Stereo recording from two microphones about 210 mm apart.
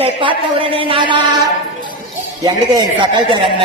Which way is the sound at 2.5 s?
20° right (ahead or behind).